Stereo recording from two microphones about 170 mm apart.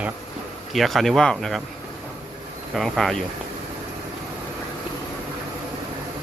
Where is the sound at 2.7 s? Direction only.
Centre (ahead or behind).